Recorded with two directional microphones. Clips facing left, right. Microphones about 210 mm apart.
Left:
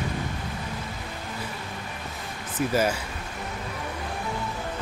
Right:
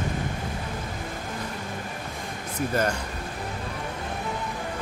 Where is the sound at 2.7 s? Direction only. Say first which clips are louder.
Left 1 dB; 5° left (ahead or behind).